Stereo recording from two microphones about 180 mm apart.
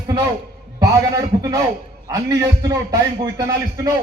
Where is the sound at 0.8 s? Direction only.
20° right (ahead or behind).